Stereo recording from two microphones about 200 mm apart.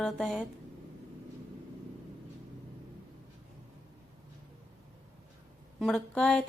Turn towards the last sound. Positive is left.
turn(degrees=5)  # may be behind; listen again after turning